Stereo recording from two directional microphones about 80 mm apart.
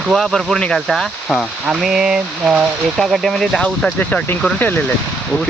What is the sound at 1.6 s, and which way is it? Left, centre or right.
Speech, centre.